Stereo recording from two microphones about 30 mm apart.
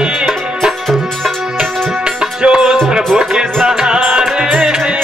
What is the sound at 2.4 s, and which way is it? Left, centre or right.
Music, right.